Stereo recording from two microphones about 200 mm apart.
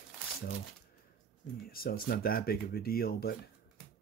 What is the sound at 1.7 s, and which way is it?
Speech, 50° left (ahead or behind).